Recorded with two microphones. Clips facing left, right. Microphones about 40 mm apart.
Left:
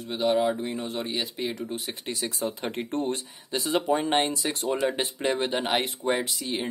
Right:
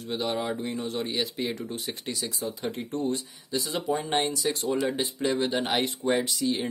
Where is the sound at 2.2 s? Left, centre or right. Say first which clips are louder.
Left 3 dB; left.